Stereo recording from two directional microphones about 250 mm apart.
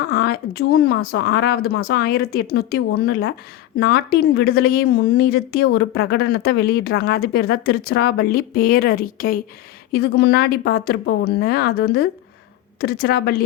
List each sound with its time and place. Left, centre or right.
0.1 s speech: left